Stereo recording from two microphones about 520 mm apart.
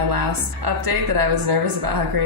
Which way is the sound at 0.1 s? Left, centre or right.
Right.